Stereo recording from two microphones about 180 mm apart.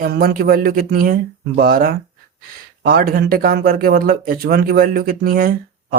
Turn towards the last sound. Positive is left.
turn(degrees=-55)  # may be behind; listen again after turning